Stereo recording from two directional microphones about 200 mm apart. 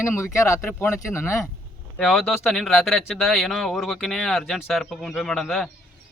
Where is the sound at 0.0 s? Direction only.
15° left (ahead or behind).